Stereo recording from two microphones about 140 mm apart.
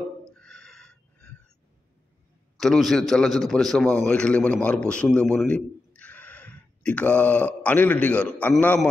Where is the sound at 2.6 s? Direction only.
Centre (ahead or behind).